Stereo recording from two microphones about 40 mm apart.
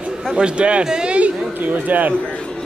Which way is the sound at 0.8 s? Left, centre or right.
Centre.